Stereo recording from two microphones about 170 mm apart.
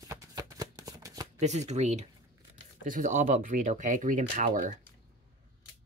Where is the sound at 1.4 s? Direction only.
40° right (ahead or behind).